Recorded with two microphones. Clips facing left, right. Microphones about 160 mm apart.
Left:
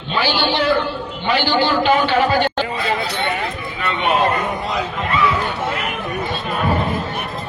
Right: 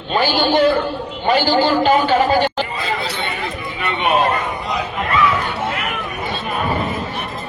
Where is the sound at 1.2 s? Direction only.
45° right (ahead or behind).